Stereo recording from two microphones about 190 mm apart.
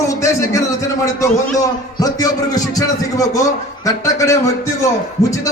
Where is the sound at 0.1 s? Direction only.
15° left (ahead or behind).